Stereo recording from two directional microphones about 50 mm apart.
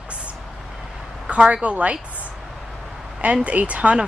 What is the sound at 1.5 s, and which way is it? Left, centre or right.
Speech, right.